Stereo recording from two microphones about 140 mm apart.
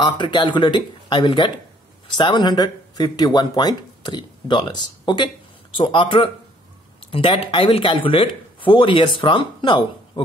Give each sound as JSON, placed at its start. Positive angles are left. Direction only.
{"t": 0.0, "sound": "speech", "side_deg": 35}